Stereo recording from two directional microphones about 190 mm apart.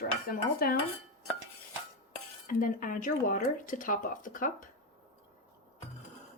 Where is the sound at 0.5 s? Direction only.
50° left (ahead or behind).